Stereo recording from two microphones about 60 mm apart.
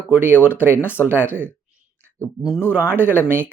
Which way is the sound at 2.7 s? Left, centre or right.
Right.